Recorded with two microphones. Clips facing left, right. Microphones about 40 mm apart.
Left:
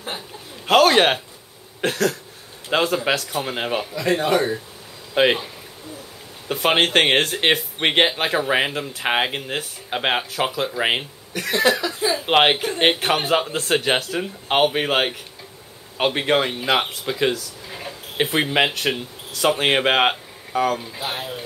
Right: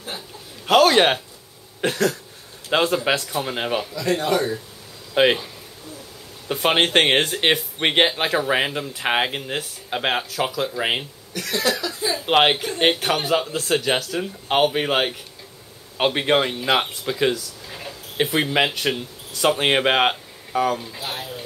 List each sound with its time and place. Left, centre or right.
0.7 s a man's voice: centre
3.8 s speech: left
5.2 s speech: centre
6.5 s speech: centre; by 13.2 s left
13.2 s a man's voice: left
14.2 s speech: centre
16.0 s speech: centre
21.0 s speech: left